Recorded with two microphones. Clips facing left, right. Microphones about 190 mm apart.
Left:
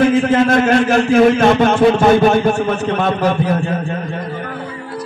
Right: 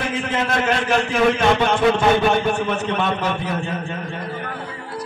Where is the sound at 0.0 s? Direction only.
45° left (ahead or behind).